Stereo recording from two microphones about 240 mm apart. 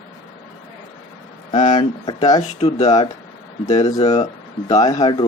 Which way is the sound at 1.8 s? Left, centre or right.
Centre.